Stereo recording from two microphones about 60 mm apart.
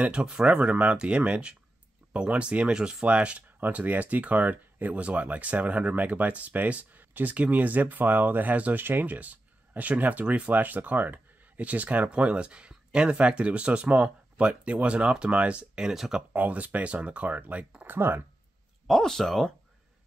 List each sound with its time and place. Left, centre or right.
0.0 s speech: centre
16.2 s speech: right
17.8 s speech: right
18.9 s speech: centre